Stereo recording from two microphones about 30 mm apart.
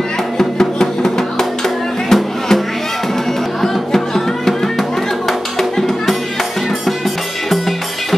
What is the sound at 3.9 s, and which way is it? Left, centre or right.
Music, centre.